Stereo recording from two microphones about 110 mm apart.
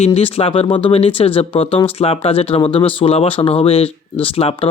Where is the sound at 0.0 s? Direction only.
60° left (ahead or behind).